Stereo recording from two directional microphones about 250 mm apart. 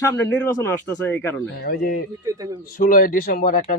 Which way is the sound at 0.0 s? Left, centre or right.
Centre.